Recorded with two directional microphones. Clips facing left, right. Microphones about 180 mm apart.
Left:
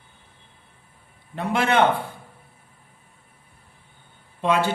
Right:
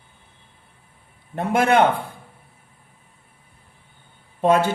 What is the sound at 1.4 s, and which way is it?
Speech, 45° right (ahead or behind).